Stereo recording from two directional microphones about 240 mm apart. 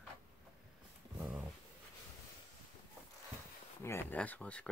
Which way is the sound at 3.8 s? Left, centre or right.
Centre.